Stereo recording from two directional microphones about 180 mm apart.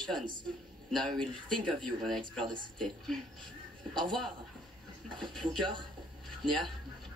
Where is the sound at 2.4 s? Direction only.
25° right (ahead or behind).